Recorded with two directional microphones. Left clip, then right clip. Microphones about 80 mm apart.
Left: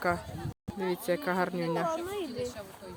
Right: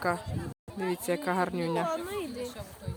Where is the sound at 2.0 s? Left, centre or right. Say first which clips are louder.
Even; right.